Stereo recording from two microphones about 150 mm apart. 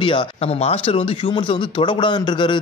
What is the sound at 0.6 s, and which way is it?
Speech, 40° left (ahead or behind).